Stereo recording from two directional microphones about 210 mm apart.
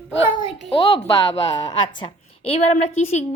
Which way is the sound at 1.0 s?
15° left (ahead or behind).